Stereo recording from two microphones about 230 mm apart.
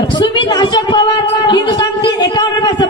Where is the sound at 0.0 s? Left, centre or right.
Centre.